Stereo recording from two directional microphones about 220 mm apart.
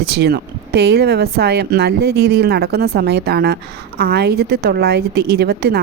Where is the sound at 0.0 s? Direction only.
45° right (ahead or behind).